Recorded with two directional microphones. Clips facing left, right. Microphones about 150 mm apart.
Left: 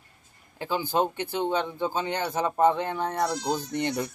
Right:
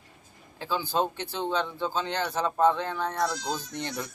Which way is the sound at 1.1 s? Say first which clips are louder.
Left 5 dB; 55° left (ahead or behind).